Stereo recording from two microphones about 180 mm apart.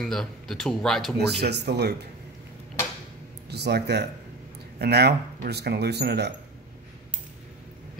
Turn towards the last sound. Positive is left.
turn(degrees=-65)  # may be behind; listen again after turning